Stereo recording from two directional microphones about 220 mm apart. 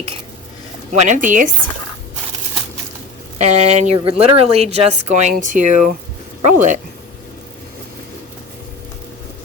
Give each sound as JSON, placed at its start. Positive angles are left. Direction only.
{"t": 0.9, "sound": "a woman's voice", "side_deg": -35}
{"t": 3.4, "sound": "a woman's voice", "side_deg": -30}